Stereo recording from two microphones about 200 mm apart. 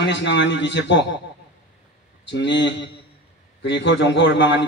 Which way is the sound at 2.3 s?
60° left (ahead or behind).